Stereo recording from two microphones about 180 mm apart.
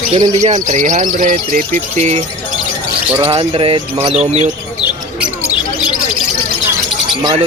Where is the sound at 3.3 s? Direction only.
30° right (ahead or behind).